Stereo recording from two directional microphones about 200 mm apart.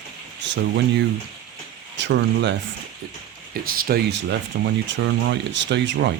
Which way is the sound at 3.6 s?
45° right (ahead or behind).